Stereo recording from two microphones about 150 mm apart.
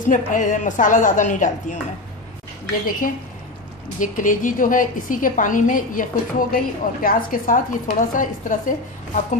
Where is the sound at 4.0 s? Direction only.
60° left (ahead or behind).